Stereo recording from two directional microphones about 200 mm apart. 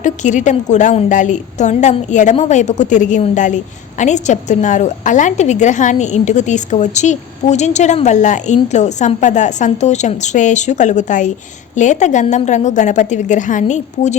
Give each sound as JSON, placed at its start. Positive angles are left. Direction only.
{"t": 0.0, "sound": "a woman's voice", "side_deg": 40}